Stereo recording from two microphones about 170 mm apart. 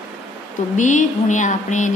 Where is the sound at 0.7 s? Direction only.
45° left (ahead or behind).